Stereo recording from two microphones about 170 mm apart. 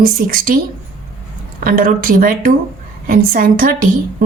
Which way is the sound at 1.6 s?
55° right (ahead or behind).